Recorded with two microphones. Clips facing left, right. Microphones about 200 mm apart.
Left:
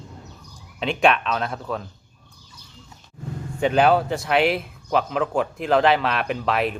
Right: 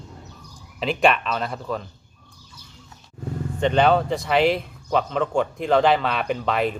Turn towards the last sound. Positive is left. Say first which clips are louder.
# even
turn(degrees=0)  # may be behind; listen again after turning